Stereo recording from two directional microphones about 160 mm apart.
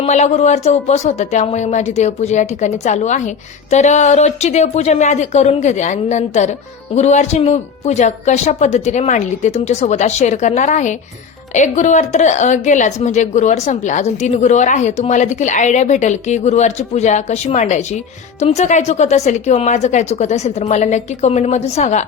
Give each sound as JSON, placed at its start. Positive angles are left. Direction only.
{"t": 0.0, "sound": "a woman's voice", "side_deg": 45}